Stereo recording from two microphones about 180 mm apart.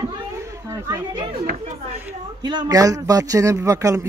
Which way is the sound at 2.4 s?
25° right (ahead or behind).